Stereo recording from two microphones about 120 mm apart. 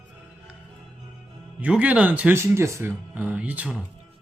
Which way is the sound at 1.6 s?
10° right (ahead or behind).